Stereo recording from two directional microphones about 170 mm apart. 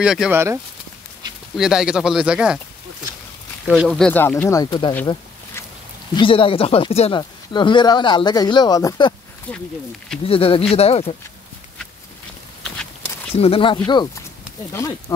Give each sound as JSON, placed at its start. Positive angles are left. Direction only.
{"t": 0.0, "sound": "speech", "side_deg": 0}
{"t": 0.3, "sound": "speech", "side_deg": -15}
{"t": 1.6, "sound": "speech", "side_deg": -5}
{"t": 3.6, "sound": "speech", "side_deg": 0}
{"t": 4.6, "sound": "speech", "side_deg": 25}
{"t": 6.1, "sound": "speech", "side_deg": 30}
{"t": 9.5, "sound": "speech", "side_deg": 5}
{"t": 10.2, "sound": "speech", "side_deg": 35}
{"t": 13.4, "sound": "speech", "side_deg": 35}
{"t": 14.7, "sound": "speech", "side_deg": 20}